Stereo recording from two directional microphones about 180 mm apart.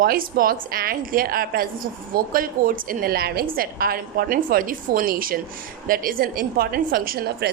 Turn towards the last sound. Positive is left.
turn(degrees=-60)  # may be behind; listen again after turning